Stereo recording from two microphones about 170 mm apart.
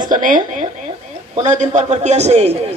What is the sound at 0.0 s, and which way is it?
A man's voice, 50° right (ahead or behind).